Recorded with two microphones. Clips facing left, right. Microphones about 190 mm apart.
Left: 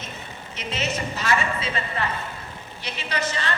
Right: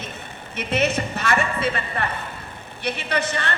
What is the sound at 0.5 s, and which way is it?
A woman's voice, 60° right (ahead or behind).